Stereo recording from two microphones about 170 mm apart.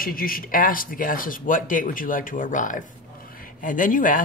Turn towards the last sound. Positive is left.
turn(degrees=50)  # may be behind; listen again after turning